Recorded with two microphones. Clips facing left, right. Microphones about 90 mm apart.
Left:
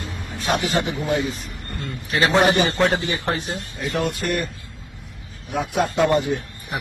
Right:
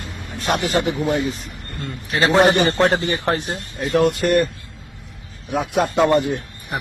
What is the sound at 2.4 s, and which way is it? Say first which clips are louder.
A man's voice: right 5 dB; 50° right (ahead or behind).